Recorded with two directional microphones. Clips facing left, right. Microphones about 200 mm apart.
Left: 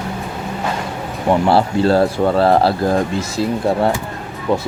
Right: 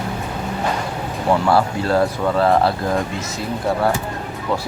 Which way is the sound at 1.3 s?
30° left (ahead or behind).